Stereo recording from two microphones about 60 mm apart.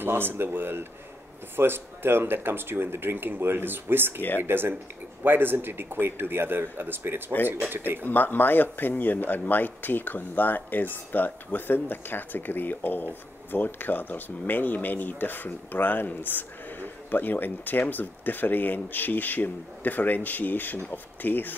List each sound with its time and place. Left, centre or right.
0.0 s speech: right
8.0 s speech: left